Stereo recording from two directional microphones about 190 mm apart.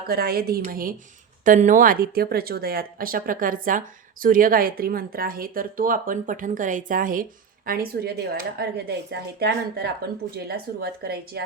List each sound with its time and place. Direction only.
0.1 s a woman's voice: 50° right (ahead or behind)